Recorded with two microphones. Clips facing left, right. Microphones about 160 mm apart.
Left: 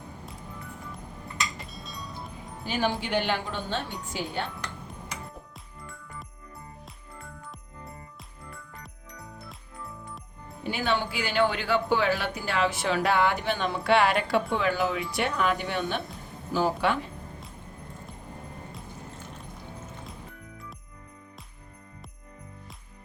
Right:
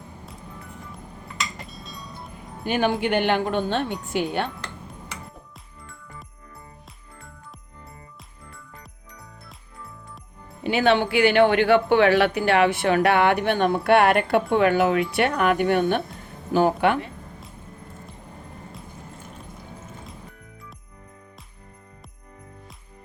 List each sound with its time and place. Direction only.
1.6 s music: centre (ahead or behind)
2.6 s speech: 60° right (ahead or behind)
10.6 s speech: 75° right (ahead or behind); by 17.1 s 60° right (ahead or behind)